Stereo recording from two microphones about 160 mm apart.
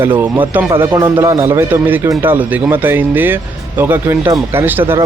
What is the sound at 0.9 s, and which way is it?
A man's voice, 25° right (ahead or behind).